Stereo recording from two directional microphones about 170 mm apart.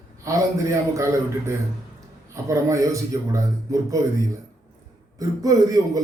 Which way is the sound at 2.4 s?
20° right (ahead or behind).